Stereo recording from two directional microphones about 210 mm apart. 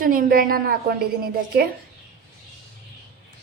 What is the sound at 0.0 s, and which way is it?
Speech, 40° right (ahead or behind).